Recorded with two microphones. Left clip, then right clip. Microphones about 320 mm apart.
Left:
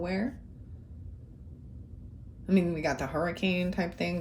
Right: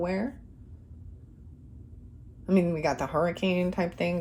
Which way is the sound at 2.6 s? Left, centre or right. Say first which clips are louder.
Right 3 dB; centre.